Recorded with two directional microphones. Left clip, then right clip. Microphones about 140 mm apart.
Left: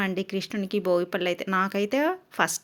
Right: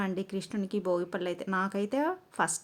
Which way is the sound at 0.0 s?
20° left (ahead or behind).